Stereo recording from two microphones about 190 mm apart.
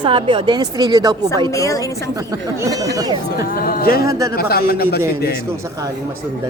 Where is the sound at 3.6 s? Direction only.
50° left (ahead or behind).